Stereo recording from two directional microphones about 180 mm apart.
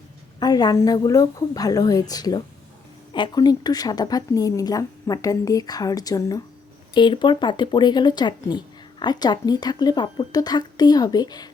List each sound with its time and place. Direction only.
0.3 s speech: 25° left (ahead or behind)